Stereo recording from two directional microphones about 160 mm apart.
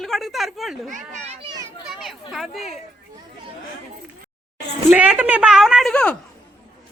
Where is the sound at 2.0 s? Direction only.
Centre (ahead or behind).